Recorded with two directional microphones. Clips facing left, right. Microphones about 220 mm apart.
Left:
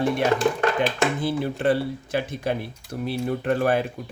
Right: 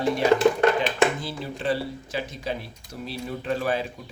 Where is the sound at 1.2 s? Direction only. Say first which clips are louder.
Left 7 dB; 55° left (ahead or behind).